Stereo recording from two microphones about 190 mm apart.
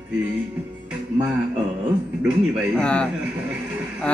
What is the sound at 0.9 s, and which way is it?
Music, 5° right (ahead or behind).